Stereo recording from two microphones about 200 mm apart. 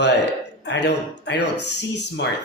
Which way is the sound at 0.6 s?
60° left (ahead or behind).